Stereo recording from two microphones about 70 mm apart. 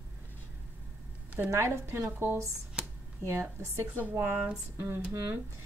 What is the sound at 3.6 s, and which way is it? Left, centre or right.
A woman's voice, right.